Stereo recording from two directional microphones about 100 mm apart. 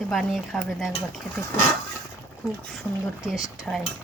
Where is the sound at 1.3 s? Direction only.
25° left (ahead or behind).